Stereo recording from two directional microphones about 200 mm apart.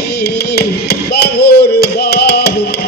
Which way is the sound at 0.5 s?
55° left (ahead or behind).